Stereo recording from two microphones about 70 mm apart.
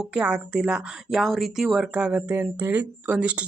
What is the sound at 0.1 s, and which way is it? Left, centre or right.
A woman's voice, centre.